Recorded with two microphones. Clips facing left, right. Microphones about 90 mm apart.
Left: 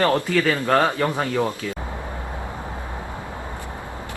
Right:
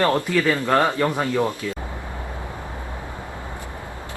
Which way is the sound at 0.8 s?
15° left (ahead or behind).